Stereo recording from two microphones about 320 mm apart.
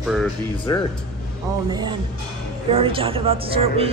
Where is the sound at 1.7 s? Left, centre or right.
Centre.